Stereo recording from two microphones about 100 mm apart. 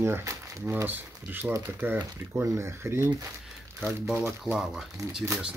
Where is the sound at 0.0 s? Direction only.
30° right (ahead or behind).